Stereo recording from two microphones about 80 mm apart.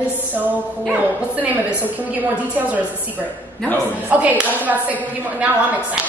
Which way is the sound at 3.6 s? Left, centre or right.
Centre.